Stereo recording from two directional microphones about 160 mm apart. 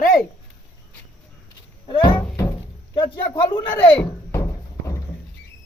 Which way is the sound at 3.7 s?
10° left (ahead or behind).